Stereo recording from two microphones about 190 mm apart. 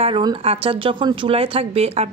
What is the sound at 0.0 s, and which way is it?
Speech, 25° right (ahead or behind).